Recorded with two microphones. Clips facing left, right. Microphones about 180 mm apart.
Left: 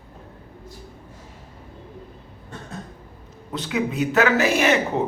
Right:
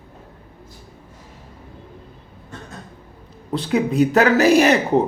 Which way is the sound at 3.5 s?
35° right (ahead or behind).